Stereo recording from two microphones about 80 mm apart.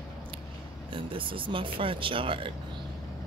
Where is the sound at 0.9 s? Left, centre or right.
Right.